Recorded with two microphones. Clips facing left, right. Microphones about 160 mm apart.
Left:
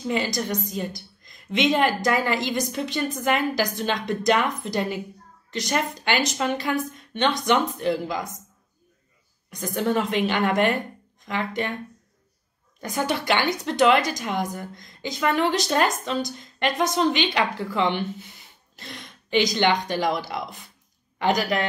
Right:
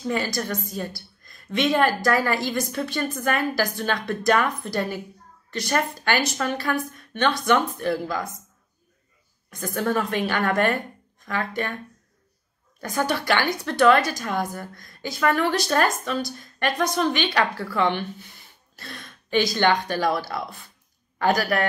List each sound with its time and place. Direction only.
0.1 s a woman's voice: 20° left (ahead or behind)
9.5 s a woman's voice: 20° left (ahead or behind)
12.8 s a woman's voice: 20° left (ahead or behind)